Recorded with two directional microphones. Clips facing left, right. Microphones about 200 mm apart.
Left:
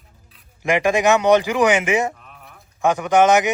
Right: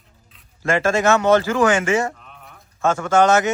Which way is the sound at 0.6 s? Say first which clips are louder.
Left 1 dB; 15° left (ahead or behind).